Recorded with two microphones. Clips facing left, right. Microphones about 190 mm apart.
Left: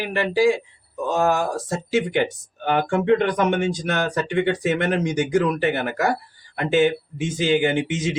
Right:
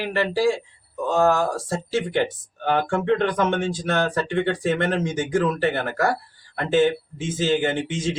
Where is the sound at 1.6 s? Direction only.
15° left (ahead or behind).